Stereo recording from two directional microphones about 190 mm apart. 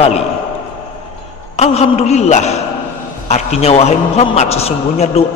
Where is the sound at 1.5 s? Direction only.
35° left (ahead or behind).